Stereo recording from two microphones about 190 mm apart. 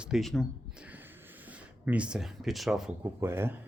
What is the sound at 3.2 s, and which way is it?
Speech, 15° right (ahead or behind).